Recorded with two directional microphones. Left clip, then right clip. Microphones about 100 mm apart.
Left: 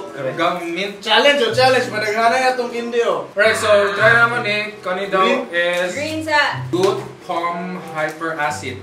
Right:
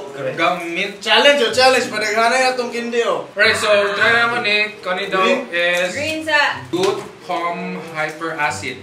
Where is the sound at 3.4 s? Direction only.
5° left (ahead or behind).